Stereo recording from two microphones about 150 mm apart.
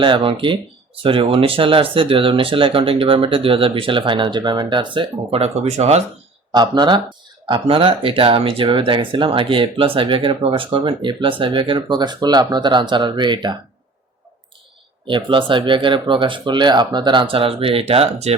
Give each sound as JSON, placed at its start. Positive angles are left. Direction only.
{"t": 0.0, "sound": "speech", "side_deg": -35}
{"t": 6.5, "sound": "speech", "side_deg": -30}
{"t": 15.0, "sound": "speech", "side_deg": -35}